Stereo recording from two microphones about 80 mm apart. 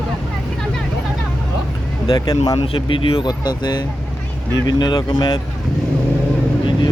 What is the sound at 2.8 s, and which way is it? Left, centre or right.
Speech, left.